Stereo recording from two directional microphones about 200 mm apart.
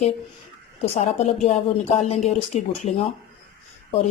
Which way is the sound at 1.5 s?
35° left (ahead or behind).